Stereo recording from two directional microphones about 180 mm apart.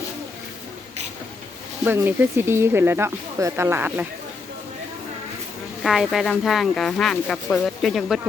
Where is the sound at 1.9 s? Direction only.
10° right (ahead or behind).